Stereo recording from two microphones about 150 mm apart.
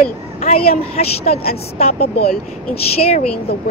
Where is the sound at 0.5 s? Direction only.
40° left (ahead or behind).